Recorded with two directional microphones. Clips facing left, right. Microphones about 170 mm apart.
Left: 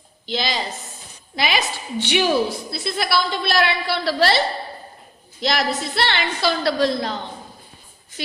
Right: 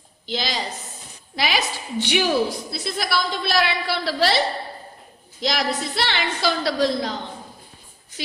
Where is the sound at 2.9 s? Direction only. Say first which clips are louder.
Left 3 dB; 65° left (ahead or behind).